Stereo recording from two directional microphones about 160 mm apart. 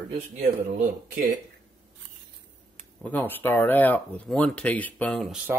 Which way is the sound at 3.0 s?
10° left (ahead or behind).